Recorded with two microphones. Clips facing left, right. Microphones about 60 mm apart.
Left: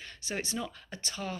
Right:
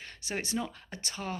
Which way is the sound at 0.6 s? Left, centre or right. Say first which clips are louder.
Right 2 dB; right.